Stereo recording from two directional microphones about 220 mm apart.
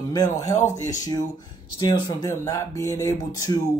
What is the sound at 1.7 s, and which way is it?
Speech, 20° left (ahead or behind).